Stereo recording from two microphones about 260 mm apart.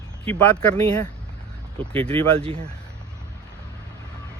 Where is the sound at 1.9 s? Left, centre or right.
Right.